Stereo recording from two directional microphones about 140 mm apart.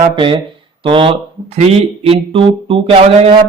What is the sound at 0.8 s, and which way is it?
Speech, 40° right (ahead or behind).